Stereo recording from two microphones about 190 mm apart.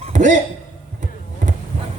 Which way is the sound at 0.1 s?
40° right (ahead or behind).